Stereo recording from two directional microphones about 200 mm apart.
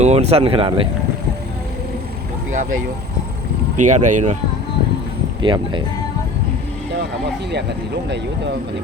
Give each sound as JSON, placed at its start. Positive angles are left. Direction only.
{"t": 0.0, "sound": "speech", "side_deg": -30}
{"t": 3.8, "sound": "speech", "side_deg": -40}
{"t": 5.4, "sound": "speech", "side_deg": -25}